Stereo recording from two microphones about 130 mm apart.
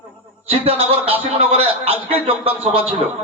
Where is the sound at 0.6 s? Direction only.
45° right (ahead or behind).